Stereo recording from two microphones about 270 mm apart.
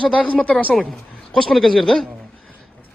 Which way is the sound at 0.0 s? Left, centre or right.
Centre.